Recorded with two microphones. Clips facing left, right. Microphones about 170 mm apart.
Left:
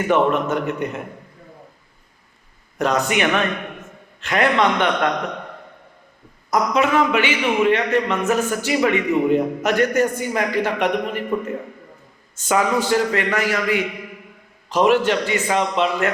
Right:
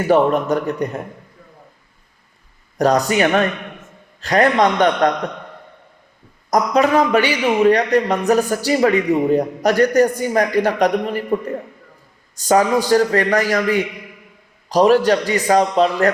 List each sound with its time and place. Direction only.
0.1 s a man's voice: 35° right (ahead or behind)
2.7 s a man's voice: 35° right (ahead or behind)
6.5 s a man's voice: 40° right (ahead or behind)